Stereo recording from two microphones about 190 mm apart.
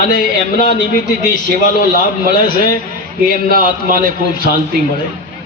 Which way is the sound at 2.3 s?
45° left (ahead or behind).